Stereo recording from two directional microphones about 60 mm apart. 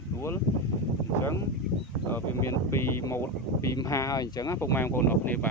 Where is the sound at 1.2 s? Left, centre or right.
Left.